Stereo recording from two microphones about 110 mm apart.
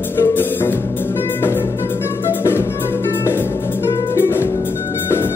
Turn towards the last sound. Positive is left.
turn(degrees=20)  # may be behind; listen again after turning